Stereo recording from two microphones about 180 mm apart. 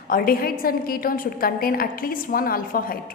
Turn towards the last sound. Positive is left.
turn(degrees=50)  # may be behind; listen again after turning